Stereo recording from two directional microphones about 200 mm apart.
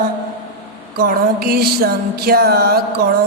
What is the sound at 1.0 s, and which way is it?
A man's voice, 50° right (ahead or behind).